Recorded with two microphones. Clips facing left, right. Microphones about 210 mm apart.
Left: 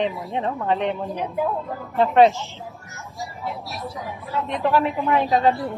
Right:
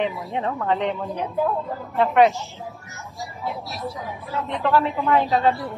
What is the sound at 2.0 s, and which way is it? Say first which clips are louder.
Speech: left 2 dB; 30° left (ahead or behind).